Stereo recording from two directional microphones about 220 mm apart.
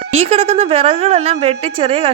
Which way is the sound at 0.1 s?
30° right (ahead or behind).